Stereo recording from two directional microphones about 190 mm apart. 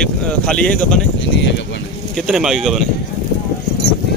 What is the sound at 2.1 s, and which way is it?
Speech, centre (ahead or behind).